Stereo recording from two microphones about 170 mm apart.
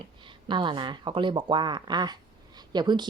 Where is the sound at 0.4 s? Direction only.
25° right (ahead or behind).